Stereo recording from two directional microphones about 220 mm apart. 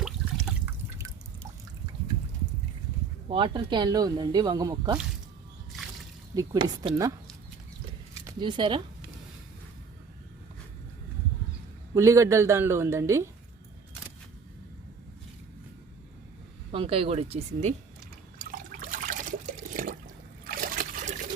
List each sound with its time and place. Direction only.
0.0 s liquid: centre (ahead or behind)
0.9 s drip: 15° right (ahead or behind)
3.2 s speech: 25° right (ahead or behind)
6.3 s a woman's voice: 20° right (ahead or behind)
8.3 s speech: 20° right (ahead or behind)
11.9 s a woman's voice: 15° right (ahead or behind)
16.7 s speech: 25° right (ahead or behind)
18.3 s liquid: 40° right (ahead or behind)
20.4 s trickle: 40° right (ahead or behind)